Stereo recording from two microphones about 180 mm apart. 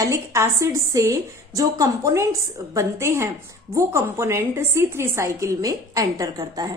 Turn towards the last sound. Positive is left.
turn(degrees=-20)  # may be behind; listen again after turning